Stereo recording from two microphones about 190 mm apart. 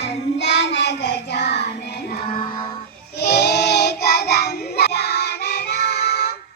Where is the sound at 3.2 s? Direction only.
60° left (ahead or behind).